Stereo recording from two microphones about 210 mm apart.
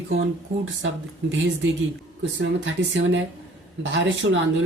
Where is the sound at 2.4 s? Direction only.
60° right (ahead or behind).